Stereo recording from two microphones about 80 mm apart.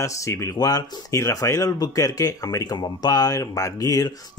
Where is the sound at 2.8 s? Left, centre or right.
Left.